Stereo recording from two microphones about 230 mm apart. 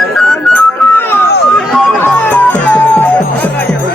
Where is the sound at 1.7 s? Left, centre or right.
Centre.